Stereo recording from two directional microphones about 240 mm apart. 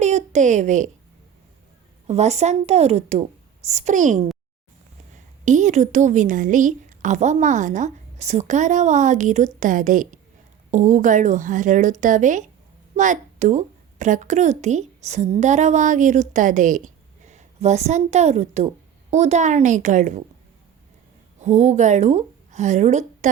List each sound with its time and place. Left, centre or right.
0.0 s a sound: right
2.0 s a woman's voice: right
21.4 s a woman's voice: right